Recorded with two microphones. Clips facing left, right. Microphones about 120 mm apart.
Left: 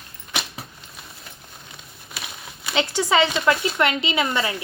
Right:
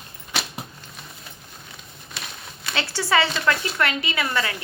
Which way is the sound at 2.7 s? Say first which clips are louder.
Left 3 dB; 20° left (ahead or behind).